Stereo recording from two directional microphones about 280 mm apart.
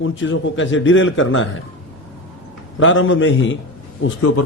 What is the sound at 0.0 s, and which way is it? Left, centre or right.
A man's voice, left.